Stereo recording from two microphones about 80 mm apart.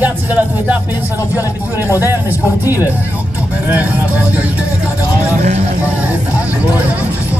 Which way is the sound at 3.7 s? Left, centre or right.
Centre.